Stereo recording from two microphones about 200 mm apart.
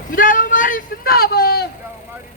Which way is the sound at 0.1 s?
40° left (ahead or behind).